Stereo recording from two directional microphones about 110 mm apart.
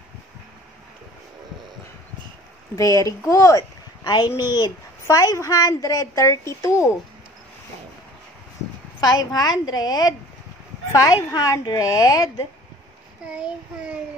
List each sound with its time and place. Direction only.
2.7 s a woman's voice: 30° left (ahead or behind)
9.0 s a woman's voice: 35° left (ahead or behind)
11.3 s a woman's voice: 35° left (ahead or behind)
13.3 s a child's voice: 10° right (ahead or behind)